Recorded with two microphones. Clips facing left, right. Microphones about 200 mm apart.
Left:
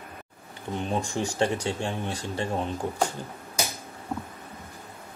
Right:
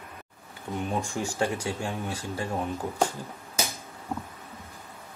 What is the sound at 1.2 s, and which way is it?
Speech, 30° left (ahead or behind).